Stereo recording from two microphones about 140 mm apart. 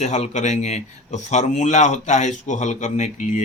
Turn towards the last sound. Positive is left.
turn(degrees=65)  # may be behind; listen again after turning